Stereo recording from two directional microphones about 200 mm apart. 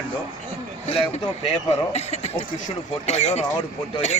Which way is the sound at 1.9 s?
30° left (ahead or behind).